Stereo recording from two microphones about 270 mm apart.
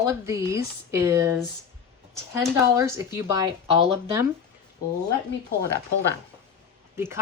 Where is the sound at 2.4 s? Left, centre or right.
Centre.